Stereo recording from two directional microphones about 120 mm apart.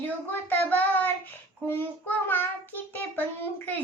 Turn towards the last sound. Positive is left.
turn(degrees=15)  # may be behind; listen again after turning